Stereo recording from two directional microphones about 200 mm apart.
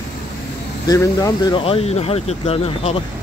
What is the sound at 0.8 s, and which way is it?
Speech, 15° left (ahead or behind).